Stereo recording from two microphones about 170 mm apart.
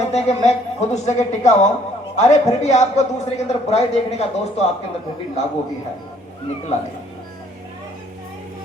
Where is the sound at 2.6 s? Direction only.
45° left (ahead or behind).